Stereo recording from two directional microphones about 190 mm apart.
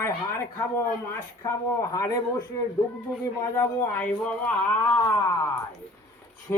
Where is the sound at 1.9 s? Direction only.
20° left (ahead or behind).